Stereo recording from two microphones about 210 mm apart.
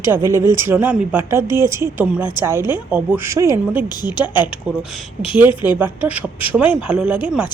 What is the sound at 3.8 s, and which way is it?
Speech, 20° left (ahead or behind).